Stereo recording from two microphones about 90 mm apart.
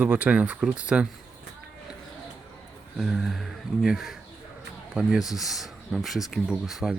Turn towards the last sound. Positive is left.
turn(degrees=-5)  # may be behind; listen again after turning